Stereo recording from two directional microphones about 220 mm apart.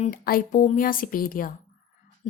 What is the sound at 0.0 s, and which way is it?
A woman's voice, 40° left (ahead or behind).